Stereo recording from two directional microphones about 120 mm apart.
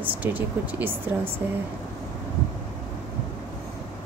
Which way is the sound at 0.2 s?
15° right (ahead or behind).